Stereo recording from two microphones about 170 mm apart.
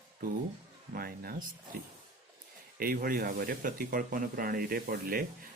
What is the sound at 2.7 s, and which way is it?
Speech, 60° right (ahead or behind).